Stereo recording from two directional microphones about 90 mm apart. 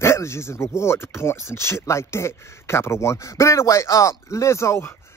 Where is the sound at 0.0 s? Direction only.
30° left (ahead or behind).